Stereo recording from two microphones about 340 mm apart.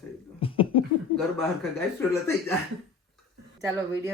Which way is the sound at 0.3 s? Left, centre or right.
Centre.